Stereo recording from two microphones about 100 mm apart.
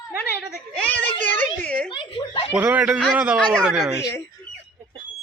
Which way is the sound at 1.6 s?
10° left (ahead or behind).